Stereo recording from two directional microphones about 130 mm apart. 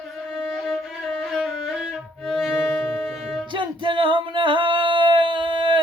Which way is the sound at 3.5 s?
40° right (ahead or behind).